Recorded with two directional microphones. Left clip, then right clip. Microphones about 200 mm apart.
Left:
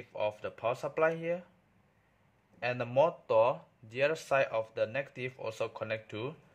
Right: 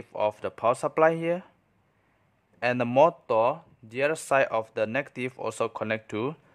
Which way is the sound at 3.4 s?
20° right (ahead or behind).